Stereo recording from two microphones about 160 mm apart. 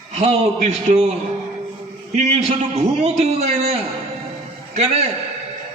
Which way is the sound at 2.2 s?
40° right (ahead or behind).